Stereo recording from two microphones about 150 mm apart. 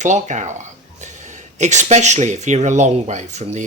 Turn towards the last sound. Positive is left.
turn(degrees=-55)  # may be behind; listen again after turning